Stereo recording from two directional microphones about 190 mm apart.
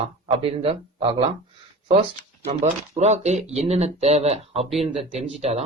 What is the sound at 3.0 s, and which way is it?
Speech, 35° right (ahead or behind).